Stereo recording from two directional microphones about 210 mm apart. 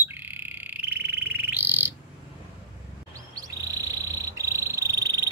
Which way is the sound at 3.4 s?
15° right (ahead or behind).